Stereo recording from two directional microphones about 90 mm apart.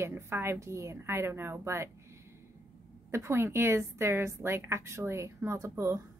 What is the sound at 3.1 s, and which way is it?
Speech, 30° right (ahead or behind).